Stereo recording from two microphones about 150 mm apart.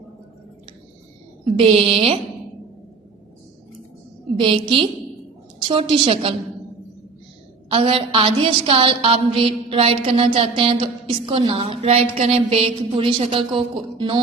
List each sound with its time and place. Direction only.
1.5 s a woman's voice: 40° right (ahead or behind)
4.4 s a woman's voice: 35° right (ahead or behind)
7.7 s a woman's voice: 35° right (ahead or behind)